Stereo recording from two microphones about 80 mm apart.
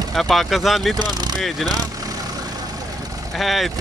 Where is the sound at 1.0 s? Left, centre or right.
Right.